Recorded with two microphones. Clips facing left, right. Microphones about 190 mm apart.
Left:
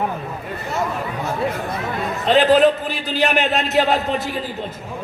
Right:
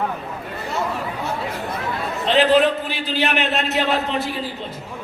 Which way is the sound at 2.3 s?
40° left (ahead or behind).